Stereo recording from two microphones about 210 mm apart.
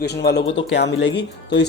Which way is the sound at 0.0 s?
50° left (ahead or behind).